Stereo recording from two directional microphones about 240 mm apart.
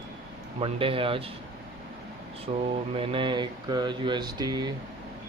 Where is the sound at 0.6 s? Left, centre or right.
Right.